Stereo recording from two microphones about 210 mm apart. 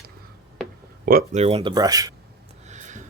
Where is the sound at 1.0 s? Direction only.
40° right (ahead or behind); by 2.1 s 15° right (ahead or behind).